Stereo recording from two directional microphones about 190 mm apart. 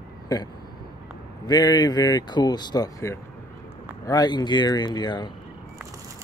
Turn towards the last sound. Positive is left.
turn(degrees=25)  # may be behind; listen again after turning